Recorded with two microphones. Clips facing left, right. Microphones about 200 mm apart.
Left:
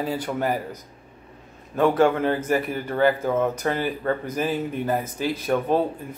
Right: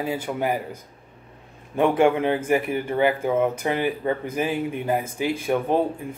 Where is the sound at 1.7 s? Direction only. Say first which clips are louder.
Even; 15° right (ahead or behind).